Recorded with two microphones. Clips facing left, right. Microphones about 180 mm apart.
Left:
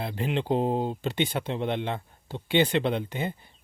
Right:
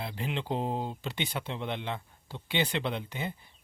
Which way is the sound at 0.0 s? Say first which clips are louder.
Left 6 dB; 50° left (ahead or behind).